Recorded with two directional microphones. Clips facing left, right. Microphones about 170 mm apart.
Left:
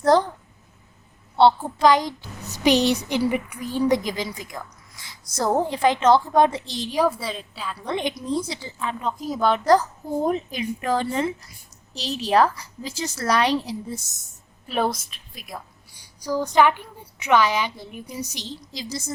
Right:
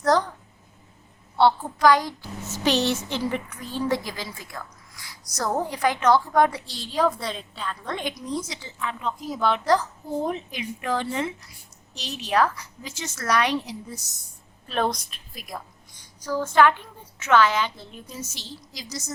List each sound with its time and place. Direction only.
0.0 s a woman's voice: 25° left (ahead or behind)
1.4 s a woman's voice: 25° left (ahead or behind)
8.4 s a woman's voice: 30° left (ahead or behind)
14.7 s a woman's voice: 5° left (ahead or behind)
15.9 s a woman's voice: 10° left (ahead or behind); by 19.1 s 30° left (ahead or behind)